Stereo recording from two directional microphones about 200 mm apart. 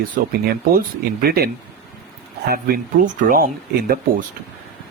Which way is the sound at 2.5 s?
45° right (ahead or behind).